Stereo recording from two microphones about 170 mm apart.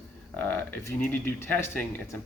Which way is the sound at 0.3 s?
10° left (ahead or behind).